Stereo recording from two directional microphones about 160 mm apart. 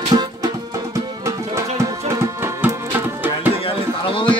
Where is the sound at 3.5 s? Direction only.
35° left (ahead or behind).